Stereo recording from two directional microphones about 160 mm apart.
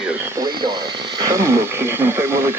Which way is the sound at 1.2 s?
15° right (ahead or behind).